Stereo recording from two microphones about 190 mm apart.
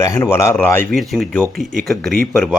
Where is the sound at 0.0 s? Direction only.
15° left (ahead or behind).